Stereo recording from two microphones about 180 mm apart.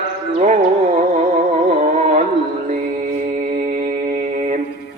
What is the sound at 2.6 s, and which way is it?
Mantra, 45° right (ahead or behind).